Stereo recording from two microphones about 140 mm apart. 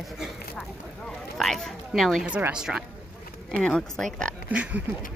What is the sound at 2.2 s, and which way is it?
Speech, 10° right (ahead or behind).